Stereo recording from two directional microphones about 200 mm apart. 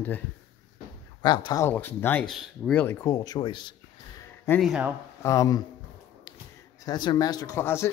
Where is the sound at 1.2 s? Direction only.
20° left (ahead or behind).